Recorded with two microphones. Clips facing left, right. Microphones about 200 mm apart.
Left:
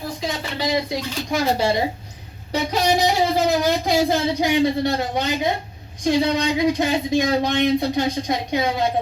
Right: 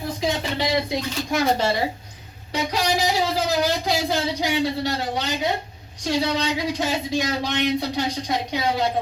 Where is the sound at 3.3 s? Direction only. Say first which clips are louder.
Left 3 dB; 50° left (ahead or behind).